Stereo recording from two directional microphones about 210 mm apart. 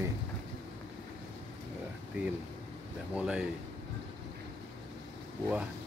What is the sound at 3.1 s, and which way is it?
Speech, 5° right (ahead or behind).